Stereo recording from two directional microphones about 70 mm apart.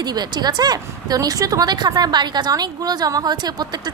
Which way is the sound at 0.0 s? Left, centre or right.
Right.